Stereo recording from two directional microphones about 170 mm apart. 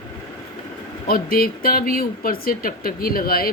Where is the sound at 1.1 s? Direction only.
60° left (ahead or behind).